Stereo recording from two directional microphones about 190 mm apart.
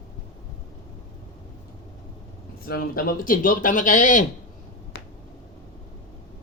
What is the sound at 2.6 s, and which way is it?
Speech, 50° left (ahead or behind).